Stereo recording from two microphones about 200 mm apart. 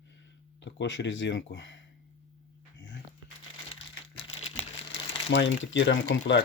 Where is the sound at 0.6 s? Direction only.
65° left (ahead or behind).